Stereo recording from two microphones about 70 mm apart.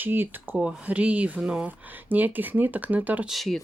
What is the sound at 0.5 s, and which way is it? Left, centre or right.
Speech, centre.